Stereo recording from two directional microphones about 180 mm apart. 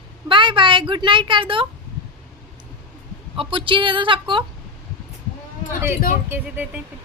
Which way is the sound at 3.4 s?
30° right (ahead or behind).